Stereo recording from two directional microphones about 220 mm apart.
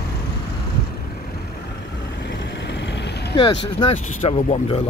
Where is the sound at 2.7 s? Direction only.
50° left (ahead or behind).